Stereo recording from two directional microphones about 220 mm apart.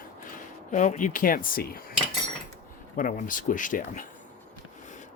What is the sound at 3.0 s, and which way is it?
Speech, 40° left (ahead or behind).